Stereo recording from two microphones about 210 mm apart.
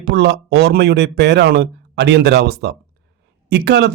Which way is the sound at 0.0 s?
55° right (ahead or behind).